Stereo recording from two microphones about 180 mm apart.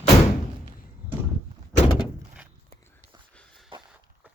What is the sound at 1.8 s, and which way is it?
Door, 30° left (ahead or behind).